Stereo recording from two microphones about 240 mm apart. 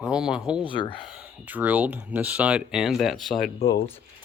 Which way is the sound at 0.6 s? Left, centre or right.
Centre.